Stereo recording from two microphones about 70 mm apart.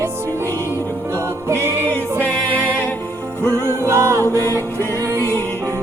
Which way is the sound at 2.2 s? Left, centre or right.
Centre.